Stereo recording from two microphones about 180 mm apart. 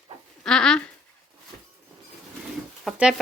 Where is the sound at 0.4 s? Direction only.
5° left (ahead or behind).